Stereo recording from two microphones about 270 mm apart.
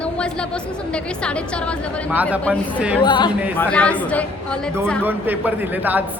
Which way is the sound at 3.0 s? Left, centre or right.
Centre.